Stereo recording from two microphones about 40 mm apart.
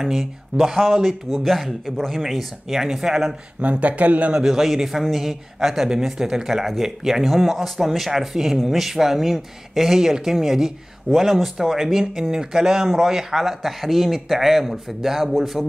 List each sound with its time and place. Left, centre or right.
0.0 s speech: centre
3.6 s speech: right
4.4 s speech: centre